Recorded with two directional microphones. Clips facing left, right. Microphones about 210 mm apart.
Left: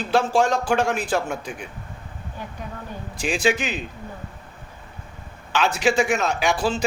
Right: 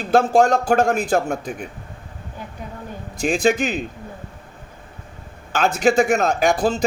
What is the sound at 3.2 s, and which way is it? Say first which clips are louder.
Speech: right 4 dB; 45° right (ahead or behind).